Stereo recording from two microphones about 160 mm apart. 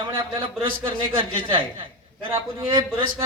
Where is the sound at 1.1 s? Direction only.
30° right (ahead or behind).